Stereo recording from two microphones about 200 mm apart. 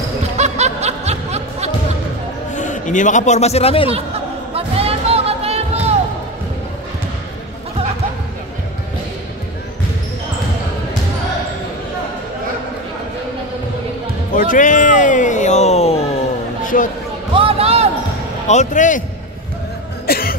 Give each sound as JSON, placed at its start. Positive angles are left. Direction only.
{"t": 0.4, "sound": "snicker", "side_deg": -35}
{"t": 2.5, "sound": "a man's voice", "side_deg": 40}
{"t": 4.6, "sound": "music", "side_deg": -30}
{"t": 14.3, "sound": "a sound", "side_deg": 40}
{"t": 17.4, "sound": "basketball bounce", "side_deg": -30}
{"t": 18.5, "sound": "speech", "side_deg": 40}
{"t": 20.1, "sound": "music", "side_deg": 50}